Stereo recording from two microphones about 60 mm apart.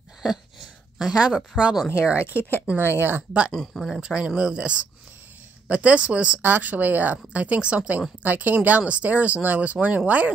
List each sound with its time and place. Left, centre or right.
0.9 s speech: centre
2.0 s speech: right
3.5 s speech: centre
3.9 s speech: centre
6.4 s speech: right